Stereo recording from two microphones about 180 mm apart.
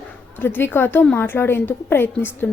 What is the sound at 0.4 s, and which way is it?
A woman's voice, 10° left (ahead or behind).